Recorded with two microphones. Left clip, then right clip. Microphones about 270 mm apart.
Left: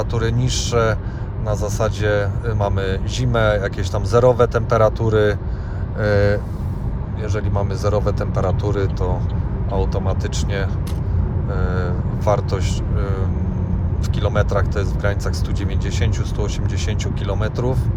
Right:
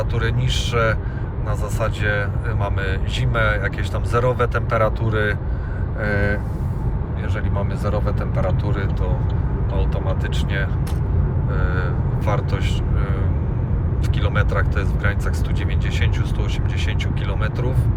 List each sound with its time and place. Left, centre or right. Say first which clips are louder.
0.0 s speech: left 2 dB; centre
11.5 s speech: left 2 dB; centre
17.2 s speech: left 6 dB; centre